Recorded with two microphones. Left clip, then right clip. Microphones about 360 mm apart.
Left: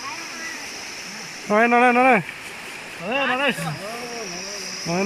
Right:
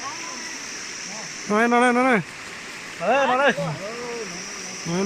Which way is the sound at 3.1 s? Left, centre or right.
Right.